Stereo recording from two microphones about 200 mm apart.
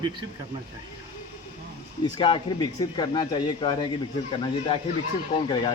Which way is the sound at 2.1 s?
25° left (ahead or behind).